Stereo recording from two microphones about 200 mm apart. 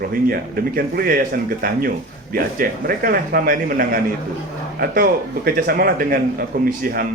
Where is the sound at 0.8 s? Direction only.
45° right (ahead or behind).